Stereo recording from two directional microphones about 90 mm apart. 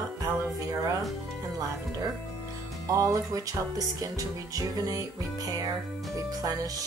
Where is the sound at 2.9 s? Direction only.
40° right (ahead or behind).